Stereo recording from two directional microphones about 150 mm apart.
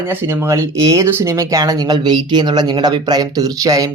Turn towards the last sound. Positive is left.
turn(degrees=-25)  # may be behind; listen again after turning